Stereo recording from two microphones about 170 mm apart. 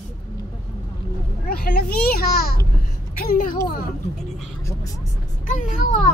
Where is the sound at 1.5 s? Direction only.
60° left (ahead or behind).